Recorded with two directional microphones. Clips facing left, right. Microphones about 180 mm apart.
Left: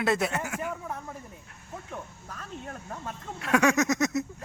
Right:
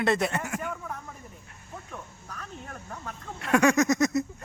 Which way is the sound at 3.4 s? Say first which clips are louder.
Right 2 dB; centre (ahead or behind).